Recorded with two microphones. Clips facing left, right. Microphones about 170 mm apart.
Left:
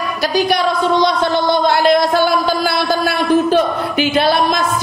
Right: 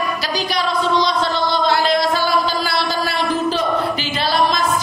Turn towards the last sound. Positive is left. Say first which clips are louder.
# left 4 dB
turn(degrees=55)  # may be behind; listen again after turning